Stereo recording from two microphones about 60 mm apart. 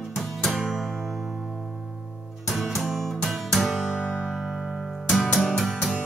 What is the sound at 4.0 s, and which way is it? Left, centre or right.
Music, left.